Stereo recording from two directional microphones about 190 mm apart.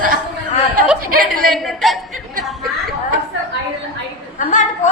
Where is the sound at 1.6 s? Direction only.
Centre (ahead or behind).